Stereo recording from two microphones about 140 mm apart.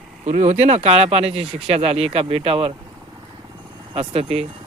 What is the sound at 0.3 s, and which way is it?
Speech, 50° right (ahead or behind).